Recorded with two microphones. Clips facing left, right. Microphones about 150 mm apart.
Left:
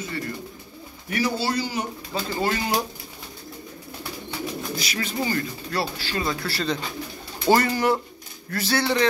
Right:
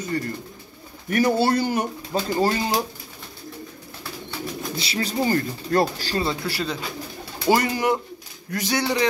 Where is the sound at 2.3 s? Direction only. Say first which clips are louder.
Right 2 dB; 30° right (ahead or behind).